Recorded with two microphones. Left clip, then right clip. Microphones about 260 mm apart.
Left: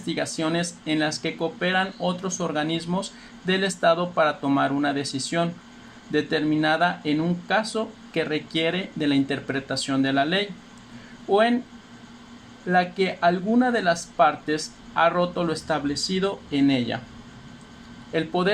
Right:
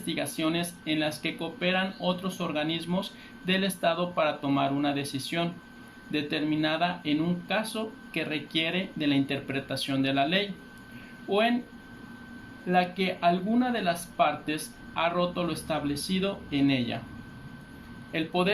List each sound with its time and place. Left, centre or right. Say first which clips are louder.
0.0 s speech: left 4 dB; left
12.6 s speech: left 4 dB; left
18.1 s speech: left 4 dB; left